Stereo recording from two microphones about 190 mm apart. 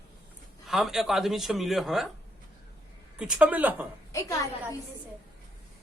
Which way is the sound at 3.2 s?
5° right (ahead or behind).